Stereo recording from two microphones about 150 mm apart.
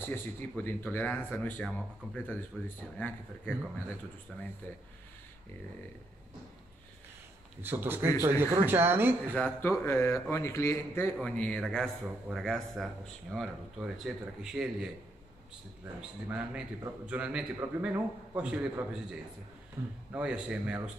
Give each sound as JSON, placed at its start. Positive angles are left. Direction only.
{"t": 0.0, "sound": "speech", "side_deg": 15}
{"t": 4.6, "sound": "speech", "side_deg": 10}
{"t": 7.6, "sound": "a man's voice", "side_deg": -15}
{"t": 9.4, "sound": "speech", "side_deg": 15}
{"t": 16.0, "sound": "a man's voice", "side_deg": -10}
{"t": 20.1, "sound": "a man's voice", "side_deg": -5}